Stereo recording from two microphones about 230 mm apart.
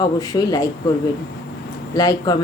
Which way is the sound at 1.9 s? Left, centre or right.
Centre.